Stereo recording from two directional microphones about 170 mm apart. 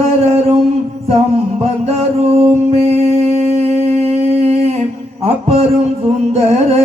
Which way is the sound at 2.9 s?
40° right (ahead or behind).